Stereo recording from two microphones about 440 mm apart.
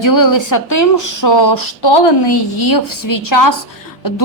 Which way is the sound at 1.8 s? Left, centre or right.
Left.